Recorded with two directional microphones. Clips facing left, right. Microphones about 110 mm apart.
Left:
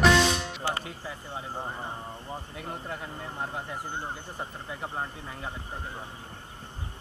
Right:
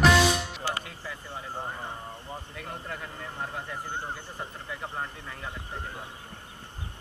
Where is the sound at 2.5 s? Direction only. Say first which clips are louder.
Left 1 dB; 25° left (ahead or behind).